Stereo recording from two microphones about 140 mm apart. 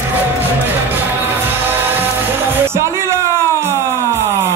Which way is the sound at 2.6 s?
20° right (ahead or behind).